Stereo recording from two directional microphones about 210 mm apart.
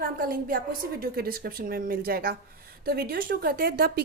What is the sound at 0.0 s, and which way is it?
A woman's voice, 45° right (ahead or behind).